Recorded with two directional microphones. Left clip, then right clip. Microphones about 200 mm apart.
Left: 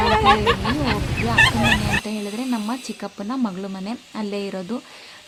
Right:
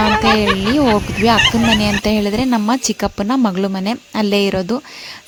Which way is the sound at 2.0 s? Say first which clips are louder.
Right 11 dB; 45° right (ahead or behind).